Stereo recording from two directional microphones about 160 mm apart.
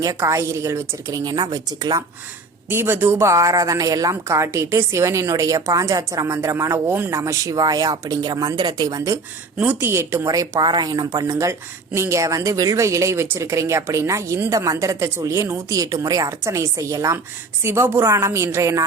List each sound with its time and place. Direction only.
0.0 s a woman's voice: 20° right (ahead or behind)
2.6 s a woman's voice: 15° right (ahead or behind)
9.6 s a woman's voice: 10° right (ahead or behind)